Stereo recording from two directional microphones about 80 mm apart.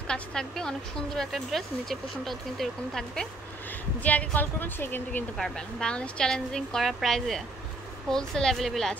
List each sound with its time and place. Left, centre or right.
0.1 s speech: centre
4.0 s a woman's voice: centre
5.4 s a woman's voice: centre